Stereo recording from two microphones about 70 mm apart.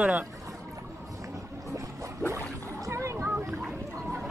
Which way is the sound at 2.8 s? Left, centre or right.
Right.